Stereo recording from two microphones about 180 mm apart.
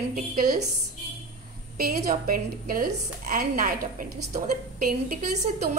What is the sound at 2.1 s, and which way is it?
A woman's voice, 50° right (ahead or behind).